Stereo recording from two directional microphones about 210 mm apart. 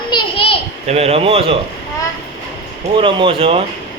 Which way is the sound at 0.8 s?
30° right (ahead or behind).